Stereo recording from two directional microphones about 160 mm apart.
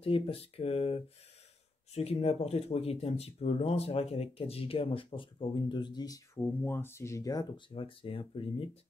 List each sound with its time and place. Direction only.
0.0 s speech: 35° left (ahead or behind)